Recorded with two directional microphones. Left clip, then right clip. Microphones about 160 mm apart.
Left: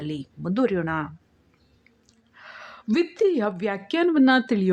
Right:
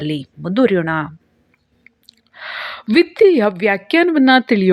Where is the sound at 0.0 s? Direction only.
20° right (ahead or behind).